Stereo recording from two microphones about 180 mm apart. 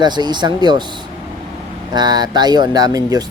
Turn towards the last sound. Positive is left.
turn(degrees=-20)  # may be behind; listen again after turning